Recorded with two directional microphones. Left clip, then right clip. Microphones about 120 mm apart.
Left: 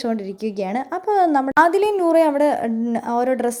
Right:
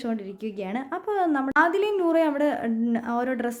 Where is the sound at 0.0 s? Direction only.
40° left (ahead or behind).